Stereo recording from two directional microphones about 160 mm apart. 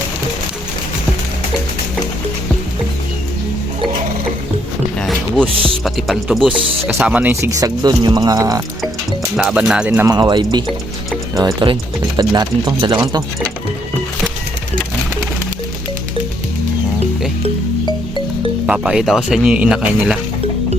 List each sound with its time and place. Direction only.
4.9 s music: 5° left (ahead or behind)
5.5 s speech: 35° right (ahead or behind)
5.8 s speech: centre (ahead or behind); by 8.6 s 20° right (ahead or behind)
9.3 s speech: 5° right (ahead or behind)
10.1 s speech: 25° right (ahead or behind)
11.6 s speech: 30° right (ahead or behind)
18.6 s speech: 5° right (ahead or behind)